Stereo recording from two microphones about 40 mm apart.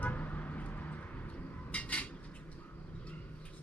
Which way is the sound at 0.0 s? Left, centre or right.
Left.